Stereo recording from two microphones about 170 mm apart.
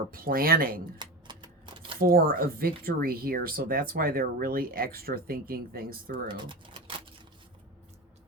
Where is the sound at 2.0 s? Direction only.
60° right (ahead or behind).